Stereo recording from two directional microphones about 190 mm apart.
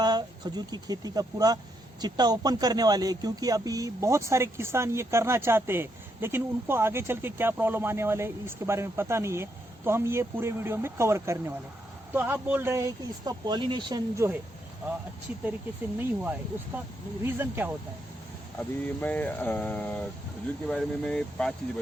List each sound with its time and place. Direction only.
0.0 s a man's voice: 20° right (ahead or behind)
16.0 s a man's voice: 10° right (ahead or behind)
18.9 s speech: 10° left (ahead or behind)